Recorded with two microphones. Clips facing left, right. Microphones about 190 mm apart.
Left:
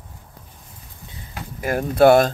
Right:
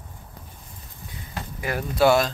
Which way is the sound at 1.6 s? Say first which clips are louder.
Left 6 dB; 50° left (ahead or behind).